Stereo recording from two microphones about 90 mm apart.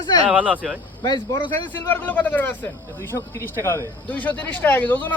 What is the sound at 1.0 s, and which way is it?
Speech, 55° left (ahead or behind).